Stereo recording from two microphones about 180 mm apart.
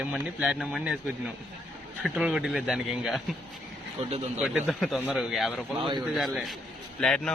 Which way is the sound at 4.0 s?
35° right (ahead or behind).